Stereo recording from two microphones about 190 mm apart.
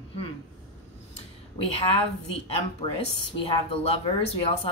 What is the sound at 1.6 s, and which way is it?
Speech, 30° left (ahead or behind).